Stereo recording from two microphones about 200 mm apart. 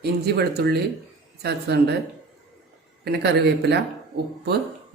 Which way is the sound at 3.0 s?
55° right (ahead or behind).